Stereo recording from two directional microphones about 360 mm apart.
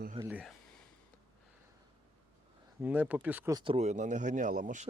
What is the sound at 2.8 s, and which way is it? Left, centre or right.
Speech, centre.